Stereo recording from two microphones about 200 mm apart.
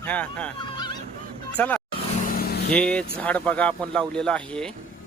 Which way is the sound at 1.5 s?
5° left (ahead or behind).